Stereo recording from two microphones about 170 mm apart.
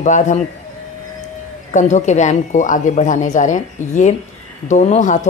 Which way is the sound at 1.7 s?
45° left (ahead or behind).